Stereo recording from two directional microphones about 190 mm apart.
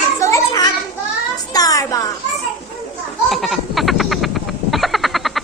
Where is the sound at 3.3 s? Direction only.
Centre (ahead or behind).